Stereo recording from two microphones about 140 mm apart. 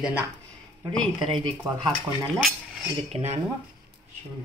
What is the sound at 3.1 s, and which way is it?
Speech, 50° right (ahead or behind).